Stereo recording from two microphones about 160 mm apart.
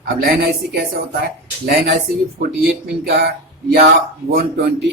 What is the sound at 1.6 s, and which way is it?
Speech, 70° right (ahead or behind).